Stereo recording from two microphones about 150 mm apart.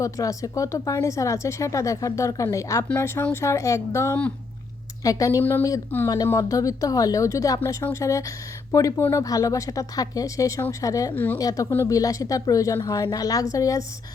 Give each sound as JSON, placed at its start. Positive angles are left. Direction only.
{"t": 0.0, "sound": "speech", "side_deg": 25}
{"t": 11.3, "sound": "speech", "side_deg": 25}